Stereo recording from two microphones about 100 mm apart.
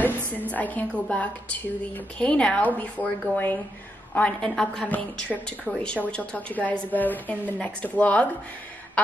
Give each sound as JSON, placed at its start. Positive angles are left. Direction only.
{"t": 0.3, "sound": "speech", "side_deg": 15}
{"t": 4.8, "sound": "speech", "side_deg": 15}